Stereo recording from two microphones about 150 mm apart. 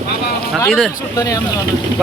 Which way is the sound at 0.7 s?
Centre (ahead or behind).